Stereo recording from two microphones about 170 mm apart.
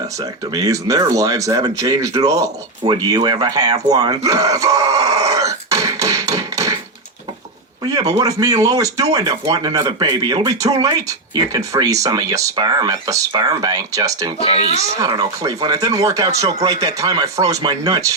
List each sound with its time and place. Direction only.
0.2 s speech: 20° right (ahead or behind)
7.9 s a man's voice: 20° right (ahead or behind)
14.3 s speech: 35° left (ahead or behind)
14.6 s speech: 40° right (ahead or behind)
14.9 s speech: 25° right (ahead or behind)